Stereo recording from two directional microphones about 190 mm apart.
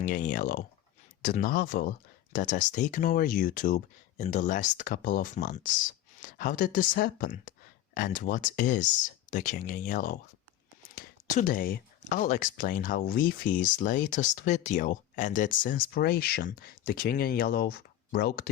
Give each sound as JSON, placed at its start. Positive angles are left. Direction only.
{"t": 0.0, "sound": "speech", "side_deg": 45}